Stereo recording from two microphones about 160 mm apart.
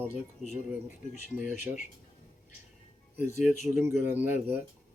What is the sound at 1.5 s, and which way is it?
Speech, 50° left (ahead or behind).